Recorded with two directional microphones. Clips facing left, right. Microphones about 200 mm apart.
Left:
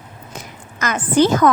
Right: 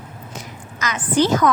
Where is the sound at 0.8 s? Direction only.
50° left (ahead or behind).